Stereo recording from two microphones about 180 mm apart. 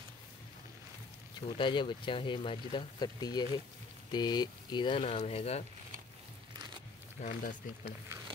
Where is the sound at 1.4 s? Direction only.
25° left (ahead or behind).